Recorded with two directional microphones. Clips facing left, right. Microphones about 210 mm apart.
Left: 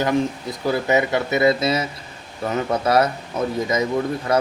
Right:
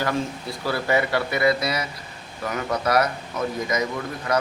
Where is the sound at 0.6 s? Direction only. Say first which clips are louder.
Left 4 dB; 20° left (ahead or behind).